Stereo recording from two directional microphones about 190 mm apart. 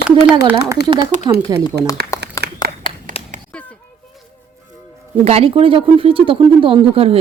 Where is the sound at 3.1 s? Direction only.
30° left (ahead or behind).